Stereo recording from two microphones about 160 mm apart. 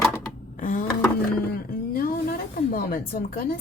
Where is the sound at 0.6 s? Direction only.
55° left (ahead or behind).